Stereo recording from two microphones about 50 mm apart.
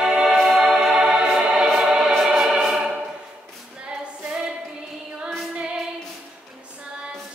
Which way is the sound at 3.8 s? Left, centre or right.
Right.